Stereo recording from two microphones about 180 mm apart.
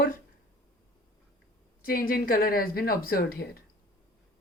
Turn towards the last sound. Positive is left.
turn(degrees=55)  # may be behind; listen again after turning